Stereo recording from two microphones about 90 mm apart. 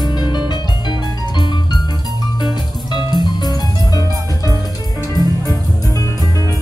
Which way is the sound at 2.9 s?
55° left (ahead or behind).